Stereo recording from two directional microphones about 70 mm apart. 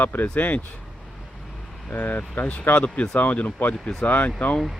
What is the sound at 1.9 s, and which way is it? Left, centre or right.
Speech, left.